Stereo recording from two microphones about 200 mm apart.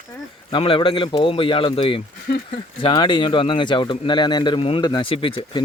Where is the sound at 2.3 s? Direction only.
50° left (ahead or behind).